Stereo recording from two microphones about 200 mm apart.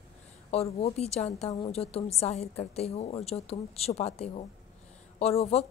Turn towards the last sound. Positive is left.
turn(degrees=35)  # may be behind; listen again after turning